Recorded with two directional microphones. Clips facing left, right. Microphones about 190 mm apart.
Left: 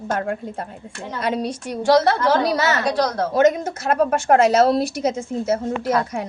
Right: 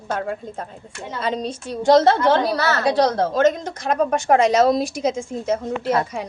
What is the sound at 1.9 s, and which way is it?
Speech, 25° right (ahead or behind).